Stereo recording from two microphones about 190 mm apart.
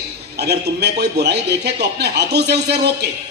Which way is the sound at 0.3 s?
60° right (ahead or behind).